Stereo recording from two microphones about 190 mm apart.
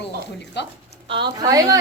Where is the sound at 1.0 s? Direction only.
25° right (ahead or behind).